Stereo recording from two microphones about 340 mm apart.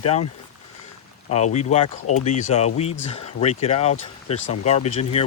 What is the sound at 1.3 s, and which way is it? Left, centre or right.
Speech, centre.